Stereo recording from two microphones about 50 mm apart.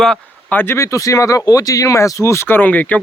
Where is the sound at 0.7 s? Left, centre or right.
Left.